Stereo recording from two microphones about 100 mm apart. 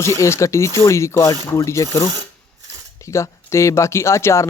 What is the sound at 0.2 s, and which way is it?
Speech, 30° left (ahead or behind).